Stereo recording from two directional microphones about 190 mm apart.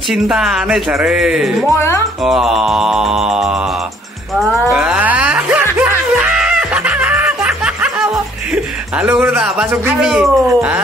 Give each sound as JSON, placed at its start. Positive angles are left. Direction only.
{"t": 0.1, "sound": "speech", "side_deg": -5}
{"t": 1.8, "sound": "speech", "side_deg": 15}
{"t": 2.2, "sound": "speech", "side_deg": 0}
{"t": 4.7, "sound": "music", "side_deg": -5}
{"t": 8.9, "sound": "speech", "side_deg": -5}